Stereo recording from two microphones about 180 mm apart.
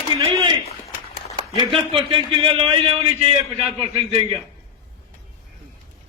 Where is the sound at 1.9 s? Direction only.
30° right (ahead or behind).